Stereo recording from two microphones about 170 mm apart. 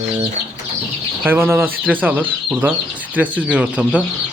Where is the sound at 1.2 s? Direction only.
15° right (ahead or behind).